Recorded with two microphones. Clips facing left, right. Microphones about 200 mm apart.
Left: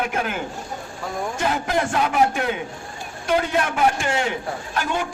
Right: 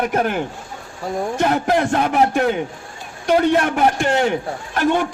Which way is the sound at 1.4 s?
55° right (ahead or behind).